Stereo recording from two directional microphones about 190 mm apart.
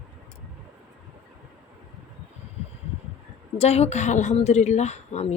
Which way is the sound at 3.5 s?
35° left (ahead or behind).